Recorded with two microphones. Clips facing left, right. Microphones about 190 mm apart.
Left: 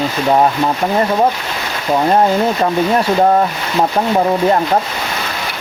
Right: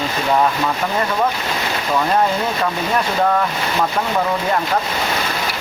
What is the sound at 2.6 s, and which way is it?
Speech, 30° left (ahead or behind).